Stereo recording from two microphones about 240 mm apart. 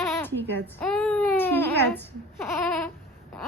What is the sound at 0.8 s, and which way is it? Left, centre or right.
Baby cry, centre.